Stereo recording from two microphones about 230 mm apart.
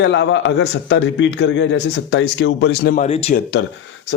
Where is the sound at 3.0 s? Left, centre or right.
Left.